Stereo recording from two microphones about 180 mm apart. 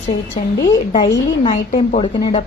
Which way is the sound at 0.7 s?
20° left (ahead or behind).